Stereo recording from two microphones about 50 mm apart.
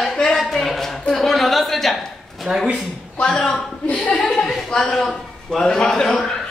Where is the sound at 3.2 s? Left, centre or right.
Left.